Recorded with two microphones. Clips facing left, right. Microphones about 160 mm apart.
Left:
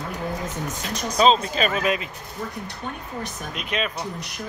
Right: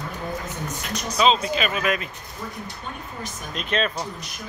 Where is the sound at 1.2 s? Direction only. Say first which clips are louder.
Left 2 dB; 35° left (ahead or behind).